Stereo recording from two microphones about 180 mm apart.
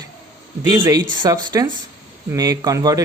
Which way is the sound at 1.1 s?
25° right (ahead or behind).